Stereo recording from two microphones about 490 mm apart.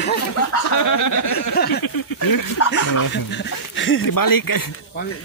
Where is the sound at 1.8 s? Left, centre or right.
Left.